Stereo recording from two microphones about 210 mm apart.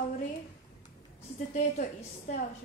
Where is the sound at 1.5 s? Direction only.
35° left (ahead or behind).